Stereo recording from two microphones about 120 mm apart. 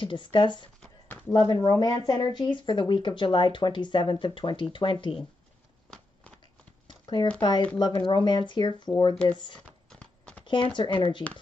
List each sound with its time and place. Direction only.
0.0 s speech: 40° left (ahead or behind)
1.0 s a sound: 15° left (ahead or behind)
1.5 s speech: 35° left (ahead or behind)
6.9 s a sound: 40° left (ahead or behind)
7.3 s speech: 40° left (ahead or behind)
9.8 s clip-clop: 10° left (ahead or behind)
10.4 s speech: 45° left (ahead or behind)